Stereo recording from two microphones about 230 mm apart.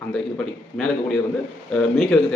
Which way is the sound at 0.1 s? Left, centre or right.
Centre.